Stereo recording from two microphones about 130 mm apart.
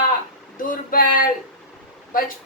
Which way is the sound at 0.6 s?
90° left.